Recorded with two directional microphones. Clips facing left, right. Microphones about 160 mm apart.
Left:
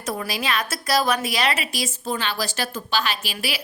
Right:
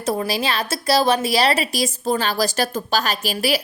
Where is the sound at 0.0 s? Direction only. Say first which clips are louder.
Right 6 dB; 30° right (ahead or behind).